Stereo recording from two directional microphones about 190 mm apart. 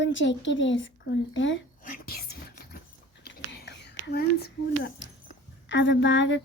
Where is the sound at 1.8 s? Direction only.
50° left (ahead or behind); by 5.1 s 65° left (ahead or behind).